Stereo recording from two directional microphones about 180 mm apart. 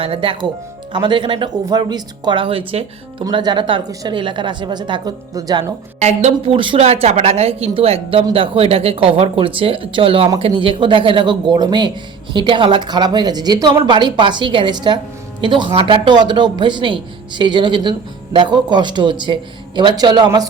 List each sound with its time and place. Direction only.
0.0 s speech: 30° right (ahead or behind)
6.0 s a woman's voice: 40° right (ahead or behind); by 20.5 s 25° right (ahead or behind)